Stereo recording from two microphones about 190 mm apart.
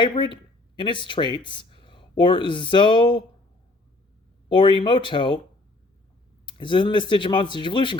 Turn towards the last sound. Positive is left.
turn(degrees=25)  # may be behind; listen again after turning